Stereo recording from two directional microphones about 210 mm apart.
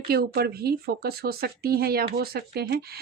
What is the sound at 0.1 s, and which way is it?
Speech, 45° right (ahead or behind).